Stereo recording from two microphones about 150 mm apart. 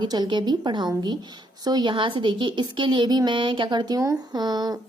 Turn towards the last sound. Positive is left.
turn(degrees=-25)  # may be behind; listen again after turning